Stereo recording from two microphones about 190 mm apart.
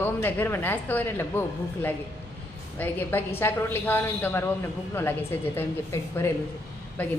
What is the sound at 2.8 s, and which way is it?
Speech, 10° left (ahead or behind).